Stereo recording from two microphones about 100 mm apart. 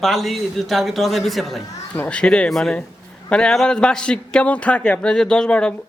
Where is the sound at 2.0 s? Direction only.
10° left (ahead or behind).